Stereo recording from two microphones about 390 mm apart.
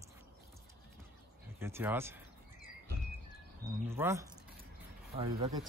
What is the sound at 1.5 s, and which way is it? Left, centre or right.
Speech, centre.